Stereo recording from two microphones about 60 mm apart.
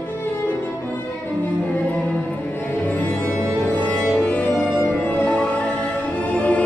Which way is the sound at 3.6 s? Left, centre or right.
Left.